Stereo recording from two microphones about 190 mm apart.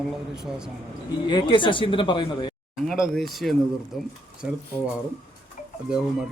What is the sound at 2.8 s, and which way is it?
Speech, centre (ahead or behind).